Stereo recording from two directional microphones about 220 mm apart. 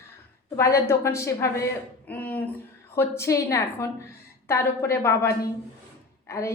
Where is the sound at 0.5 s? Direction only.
10° left (ahead or behind).